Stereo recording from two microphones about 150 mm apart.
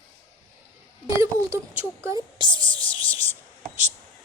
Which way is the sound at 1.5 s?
15° right (ahead or behind).